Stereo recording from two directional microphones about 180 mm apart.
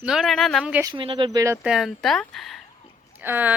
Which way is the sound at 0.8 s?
30° right (ahead or behind).